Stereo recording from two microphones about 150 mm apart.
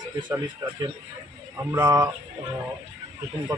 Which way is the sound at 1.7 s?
20° right (ahead or behind).